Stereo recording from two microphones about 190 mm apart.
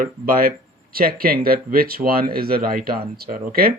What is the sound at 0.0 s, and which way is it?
Speech, 50° right (ahead or behind).